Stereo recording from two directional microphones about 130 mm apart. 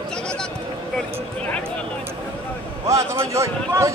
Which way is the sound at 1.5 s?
5° left (ahead or behind).